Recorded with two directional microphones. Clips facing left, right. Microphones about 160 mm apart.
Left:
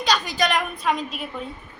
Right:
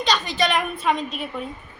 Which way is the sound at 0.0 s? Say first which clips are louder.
Even; centre (ahead or behind).